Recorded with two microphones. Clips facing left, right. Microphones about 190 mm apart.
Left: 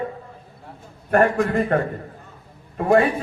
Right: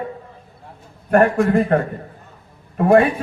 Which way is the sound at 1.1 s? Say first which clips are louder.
Right 3 dB; 50° right (ahead or behind).